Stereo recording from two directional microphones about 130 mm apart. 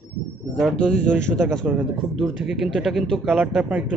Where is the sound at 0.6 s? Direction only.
5° left (ahead or behind).